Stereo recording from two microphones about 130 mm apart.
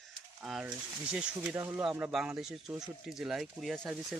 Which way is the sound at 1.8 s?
5° right (ahead or behind).